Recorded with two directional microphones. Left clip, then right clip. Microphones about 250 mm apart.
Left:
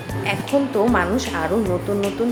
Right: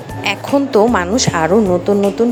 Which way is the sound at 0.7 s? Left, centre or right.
Right.